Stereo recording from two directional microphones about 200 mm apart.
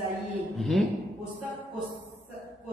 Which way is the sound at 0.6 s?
Centre (ahead or behind).